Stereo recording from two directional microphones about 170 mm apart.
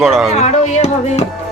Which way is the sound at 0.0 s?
Centre (ahead or behind).